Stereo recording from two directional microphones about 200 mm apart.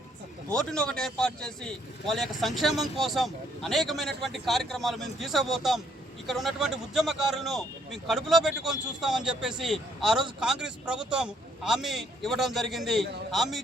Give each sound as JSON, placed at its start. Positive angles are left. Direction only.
{"t": 0.5, "sound": "speech", "side_deg": 5}